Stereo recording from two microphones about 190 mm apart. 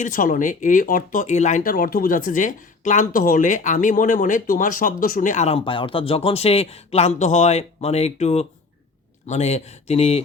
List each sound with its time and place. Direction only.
0.0 s speech: 45° left (ahead or behind)